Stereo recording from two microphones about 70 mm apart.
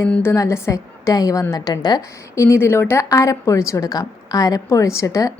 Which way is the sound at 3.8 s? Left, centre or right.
Left.